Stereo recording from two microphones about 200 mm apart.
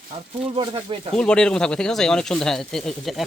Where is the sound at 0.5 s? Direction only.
25° right (ahead or behind).